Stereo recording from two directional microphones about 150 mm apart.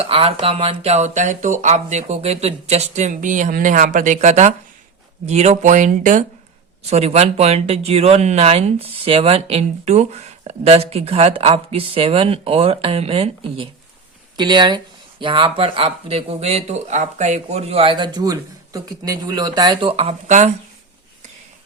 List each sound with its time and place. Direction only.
0.0 s speech: 40° right (ahead or behind); by 6.2 s 60° right (ahead or behind)
6.8 s speech: 45° right (ahead or behind)
14.3 s speech: 30° right (ahead or behind)
19.9 s speech: 40° right (ahead or behind)